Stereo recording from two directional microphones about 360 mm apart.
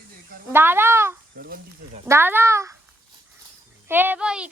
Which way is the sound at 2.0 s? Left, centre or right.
Centre.